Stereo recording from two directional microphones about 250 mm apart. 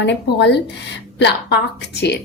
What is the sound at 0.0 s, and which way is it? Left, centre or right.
A woman's voice, left.